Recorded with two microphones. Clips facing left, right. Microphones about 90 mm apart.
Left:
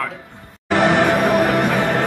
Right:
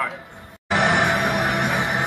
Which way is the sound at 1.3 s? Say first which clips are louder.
Left 6 dB; 15° right (ahead or behind).